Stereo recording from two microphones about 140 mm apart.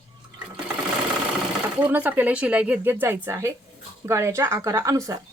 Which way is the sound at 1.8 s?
10° right (ahead or behind).